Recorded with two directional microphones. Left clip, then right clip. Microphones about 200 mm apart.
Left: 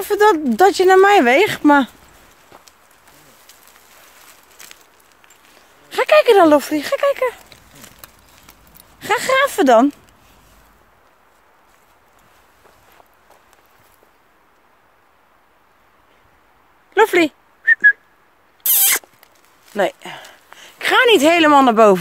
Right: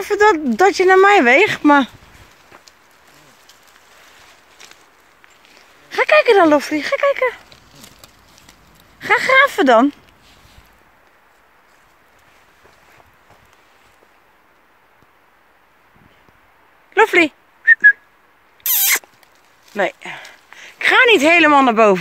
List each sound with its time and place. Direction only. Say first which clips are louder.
0.0 s speech: even; 15° left (ahead or behind)
5.9 s speech: even; 15° left (ahead or behind)
8.7 s speech: right 3 dB; 10° left (ahead or behind)
16.9 s speech: right 1 dB; 15° left (ahead or behind)
17.6 s whistling: right 2 dB; 15° left (ahead or behind)
19.7 s speech: left 1 dB; 25° left (ahead or behind)